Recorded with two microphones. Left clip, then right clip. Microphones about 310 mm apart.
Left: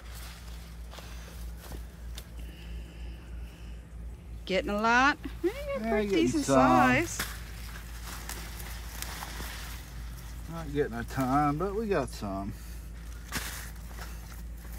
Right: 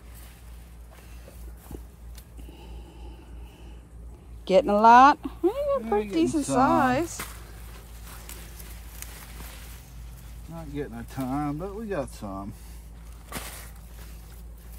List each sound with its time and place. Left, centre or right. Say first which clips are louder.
4.5 s speech: right 11 dB; centre
10.5 s speech: left 4 dB; centre